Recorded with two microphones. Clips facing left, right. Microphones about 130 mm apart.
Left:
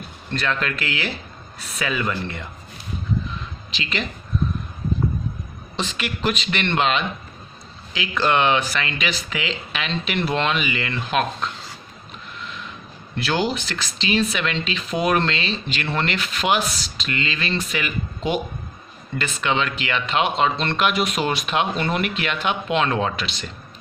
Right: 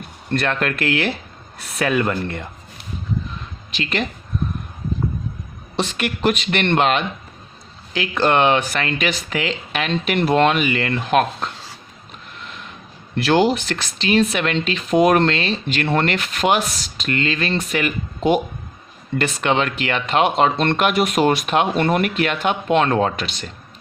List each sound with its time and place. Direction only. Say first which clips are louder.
0.3 s speech: right 4 dB; 55° right (ahead or behind)
3.7 s speech: right 5 dB; 50° right (ahead or behind)
5.7 s speech: right 5 dB; 60° right (ahead or behind)
12.4 s a sound: left 2 dB; 50° right (ahead or behind)
13.1 s speech: right 7 dB; 55° right (ahead or behind)